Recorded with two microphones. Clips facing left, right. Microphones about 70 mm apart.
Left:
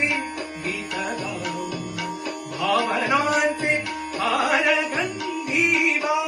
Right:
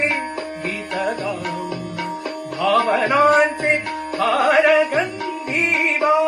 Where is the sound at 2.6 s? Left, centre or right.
Right.